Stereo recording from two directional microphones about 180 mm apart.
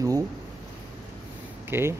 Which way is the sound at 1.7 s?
15° right (ahead or behind).